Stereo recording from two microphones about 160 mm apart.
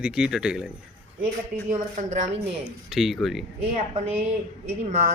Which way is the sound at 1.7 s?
45° right (ahead or behind).